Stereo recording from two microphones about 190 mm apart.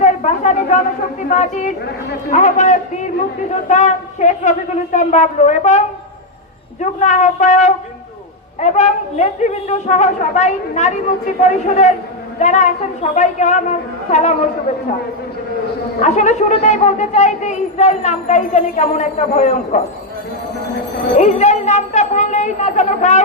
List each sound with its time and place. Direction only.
0.0 s a sound: 40° left (ahead or behind)
1.3 s a man's voice: 40° left (ahead or behind)
7.0 s a man's voice: 40° left (ahead or behind)
16.0 s a man's voice: 35° left (ahead or behind)
21.2 s a woman's voice: 35° left (ahead or behind)